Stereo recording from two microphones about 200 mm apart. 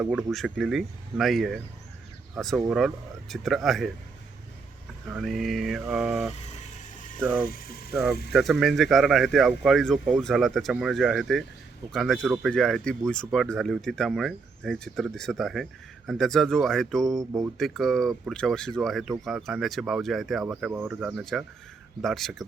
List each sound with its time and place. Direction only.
0.0 s speech: 5° right (ahead or behind)
5.1 s speech: centre (ahead or behind)
7.4 s speech: 50° left (ahead or behind)
8.3 s speech: centre (ahead or behind)